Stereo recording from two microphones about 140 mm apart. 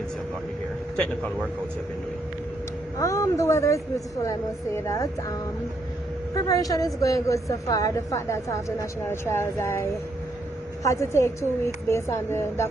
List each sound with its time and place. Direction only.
3.0 s a woman's voice: 25° left (ahead or behind)
6.3 s a woman's voice: 25° left (ahead or behind)